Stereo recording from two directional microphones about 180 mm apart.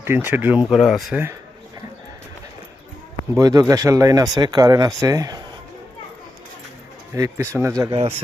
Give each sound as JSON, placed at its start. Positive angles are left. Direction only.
{"t": 0.0, "sound": "speech", "side_deg": -10}
{"t": 3.3, "sound": "speech", "side_deg": -20}
{"t": 7.1, "sound": "speech", "side_deg": -15}